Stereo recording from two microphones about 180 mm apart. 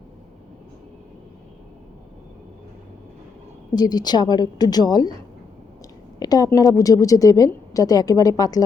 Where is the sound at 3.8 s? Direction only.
25° left (ahead or behind).